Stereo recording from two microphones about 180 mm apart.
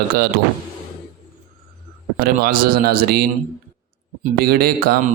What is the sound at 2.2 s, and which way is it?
Speech, 55° right (ahead or behind).